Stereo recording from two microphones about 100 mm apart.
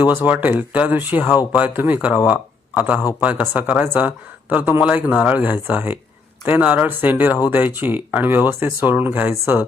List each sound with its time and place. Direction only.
0.0 s speech: 15° right (ahead or behind)